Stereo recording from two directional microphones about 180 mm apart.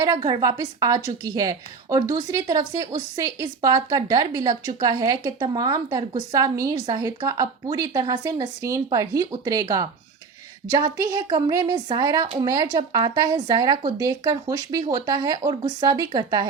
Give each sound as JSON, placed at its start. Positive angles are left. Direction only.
{"t": 0.0, "sound": "a woman's voice", "side_deg": -20}
{"t": 10.9, "sound": "a woman's voice", "side_deg": -20}